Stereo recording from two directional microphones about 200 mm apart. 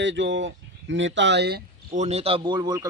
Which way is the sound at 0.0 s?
65° right (ahead or behind).